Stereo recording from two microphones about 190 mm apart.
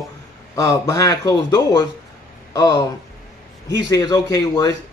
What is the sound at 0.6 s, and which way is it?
A man's voice, 15° left (ahead or behind).